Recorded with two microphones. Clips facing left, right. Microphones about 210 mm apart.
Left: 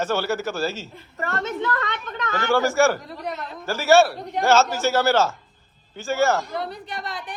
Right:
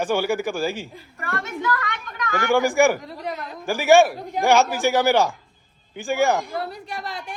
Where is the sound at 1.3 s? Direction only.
25° left (ahead or behind).